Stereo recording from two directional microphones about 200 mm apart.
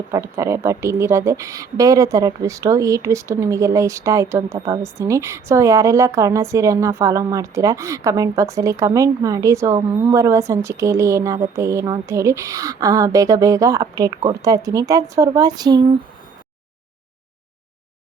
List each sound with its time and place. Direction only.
0.1 s a woman's voice: 15° right (ahead or behind)